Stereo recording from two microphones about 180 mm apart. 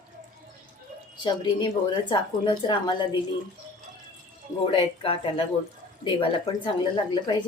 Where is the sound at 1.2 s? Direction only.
25° left (ahead or behind).